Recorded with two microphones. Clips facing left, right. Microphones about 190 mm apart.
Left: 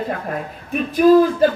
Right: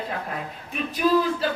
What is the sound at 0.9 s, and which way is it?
Speech, 50° left (ahead or behind).